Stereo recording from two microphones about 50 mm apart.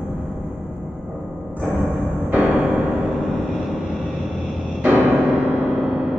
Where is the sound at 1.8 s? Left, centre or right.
Centre.